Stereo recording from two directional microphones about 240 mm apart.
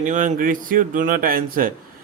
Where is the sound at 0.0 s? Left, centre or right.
Right.